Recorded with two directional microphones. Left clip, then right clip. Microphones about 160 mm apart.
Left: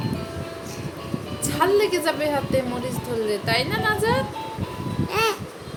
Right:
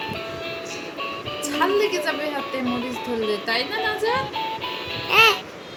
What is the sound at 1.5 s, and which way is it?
A woman's voice, 90° left.